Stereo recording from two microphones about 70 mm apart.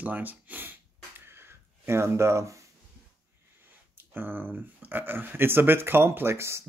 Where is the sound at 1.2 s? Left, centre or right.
Right.